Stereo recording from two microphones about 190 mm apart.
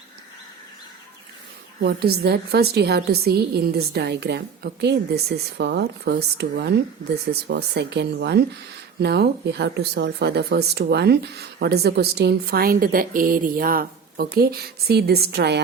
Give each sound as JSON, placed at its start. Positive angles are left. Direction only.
{"t": 1.8, "sound": "speech", "side_deg": -55}